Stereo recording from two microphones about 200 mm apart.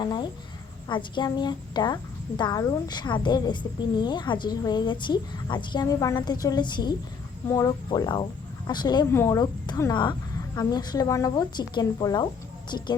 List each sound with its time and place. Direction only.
0.0 s a woman's voice: 20° left (ahead or behind)